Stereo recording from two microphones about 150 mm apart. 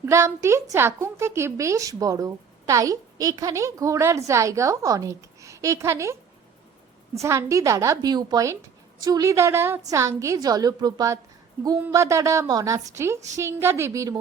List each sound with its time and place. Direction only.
0.0 s a woman's voice: 15° right (ahead or behind)